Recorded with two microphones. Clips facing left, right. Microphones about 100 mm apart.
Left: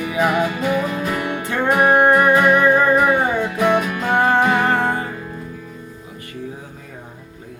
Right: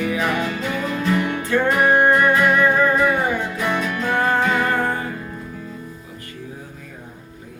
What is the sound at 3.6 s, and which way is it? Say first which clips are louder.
Music: left 5 dB; 15° left (ahead or behind).